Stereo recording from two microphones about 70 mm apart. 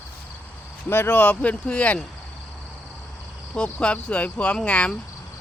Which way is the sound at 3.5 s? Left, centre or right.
Centre.